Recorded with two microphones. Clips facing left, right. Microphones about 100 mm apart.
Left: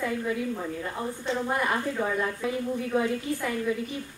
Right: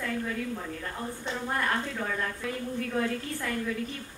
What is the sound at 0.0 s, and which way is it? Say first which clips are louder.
A woman's voice: left 4 dB; 15° left (ahead or behind).